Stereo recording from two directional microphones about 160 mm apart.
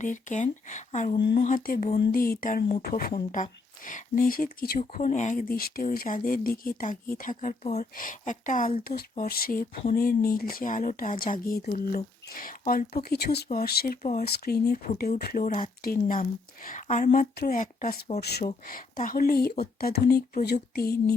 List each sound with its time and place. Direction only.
0.0 s speech: 50° left (ahead or behind)
2.9 s speech: 60° left (ahead or behind)
4.9 s speech: 55° left (ahead or behind)
8.8 s speech: 65° left (ahead or behind)
16.6 s speech: 50° left (ahead or behind)
18.2 s speech: 90° left; by 21.0 s 75° left (ahead or behind)